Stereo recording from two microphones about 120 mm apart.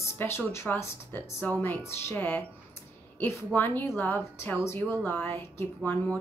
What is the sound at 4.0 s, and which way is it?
Speech, 15° left (ahead or behind).